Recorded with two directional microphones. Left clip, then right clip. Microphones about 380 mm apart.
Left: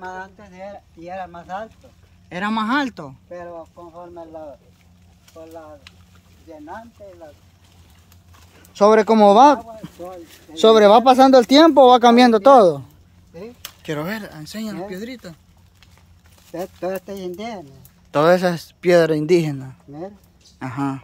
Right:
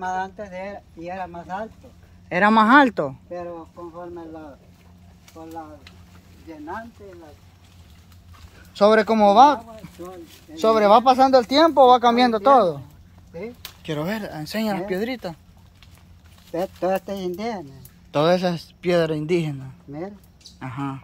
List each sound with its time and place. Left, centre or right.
0.0 s speech: centre
8.7 s speech: centre
13.8 s speech: centre
16.5 s speech: centre